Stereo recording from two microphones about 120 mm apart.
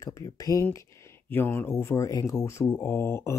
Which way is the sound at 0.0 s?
30° left (ahead or behind).